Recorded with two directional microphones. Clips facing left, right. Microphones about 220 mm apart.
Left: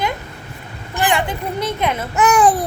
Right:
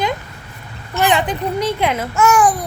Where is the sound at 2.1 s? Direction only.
20° left (ahead or behind).